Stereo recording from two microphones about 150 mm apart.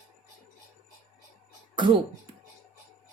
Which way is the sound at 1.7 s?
30° right (ahead or behind).